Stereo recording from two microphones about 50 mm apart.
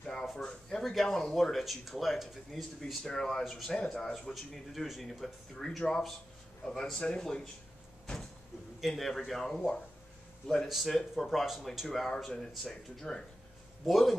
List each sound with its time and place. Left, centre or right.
0.0 s a sound: centre
0.5 s speech: centre
2.8 s speech: centre
3.7 s speech: centre
4.3 s speech: centre
7.0 s speech: centre
8.8 s speech: centre
10.7 s speech: centre
11.4 s speech: centre
12.3 s speech: centre
13.8 s speech: centre